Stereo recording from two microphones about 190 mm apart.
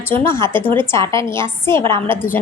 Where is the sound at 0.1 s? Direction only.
15° left (ahead or behind).